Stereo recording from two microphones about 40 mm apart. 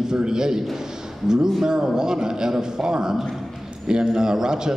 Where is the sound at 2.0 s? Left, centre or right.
Centre.